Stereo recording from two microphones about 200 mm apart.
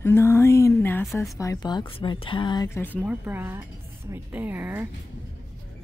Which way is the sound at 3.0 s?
5° right (ahead or behind).